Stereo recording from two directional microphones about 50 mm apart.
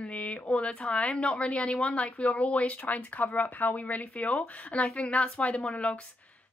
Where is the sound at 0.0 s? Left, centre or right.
Left.